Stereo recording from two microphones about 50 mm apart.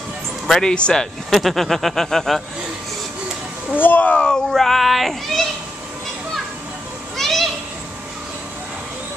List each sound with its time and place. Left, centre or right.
0.5 s speech: centre
1.3 s speech: centre
3.7 s speech: left
4.1 s speech: centre
4.5 s speech: centre
7.2 s children playing: centre